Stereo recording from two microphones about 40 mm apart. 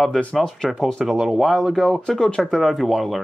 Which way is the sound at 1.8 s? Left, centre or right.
Centre.